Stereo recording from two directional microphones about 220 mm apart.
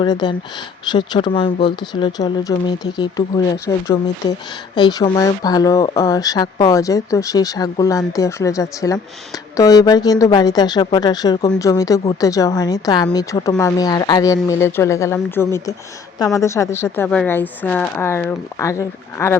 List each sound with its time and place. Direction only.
0.0 s speech: 20° left (ahead or behind)